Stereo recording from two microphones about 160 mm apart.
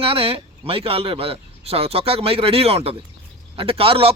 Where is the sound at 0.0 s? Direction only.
35° right (ahead or behind).